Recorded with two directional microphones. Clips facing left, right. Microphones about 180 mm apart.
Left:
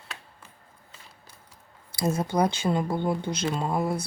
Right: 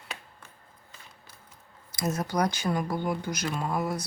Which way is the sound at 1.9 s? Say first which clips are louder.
Left 3 dB; 30° left (ahead or behind).